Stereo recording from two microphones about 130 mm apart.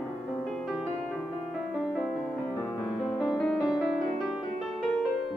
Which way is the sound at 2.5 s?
15° left (ahead or behind).